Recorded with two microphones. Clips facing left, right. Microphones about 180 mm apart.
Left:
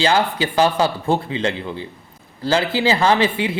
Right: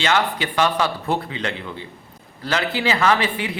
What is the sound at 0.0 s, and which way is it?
A man's voice, 30° left (ahead or behind).